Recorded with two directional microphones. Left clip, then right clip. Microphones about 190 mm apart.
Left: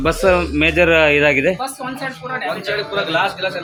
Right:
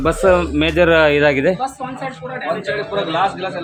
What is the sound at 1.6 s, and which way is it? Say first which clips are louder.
Speech: right 1 dB; centre (ahead or behind).